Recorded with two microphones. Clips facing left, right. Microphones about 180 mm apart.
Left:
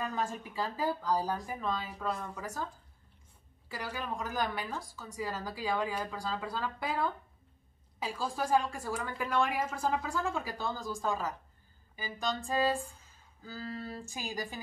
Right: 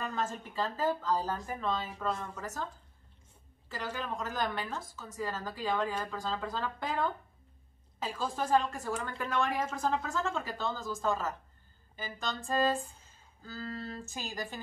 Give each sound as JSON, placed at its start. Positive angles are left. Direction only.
{"t": 0.0, "sound": "a woman's voice", "side_deg": 10}